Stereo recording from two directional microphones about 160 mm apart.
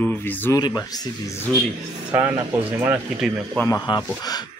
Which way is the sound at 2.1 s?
15° right (ahead or behind).